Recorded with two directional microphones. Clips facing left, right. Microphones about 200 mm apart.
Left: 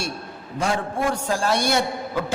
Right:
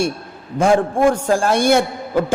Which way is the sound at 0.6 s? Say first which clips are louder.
Right 10 dB; 50° right (ahead or behind).